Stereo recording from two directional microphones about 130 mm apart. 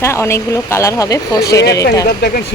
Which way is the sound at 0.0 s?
20° left (ahead or behind).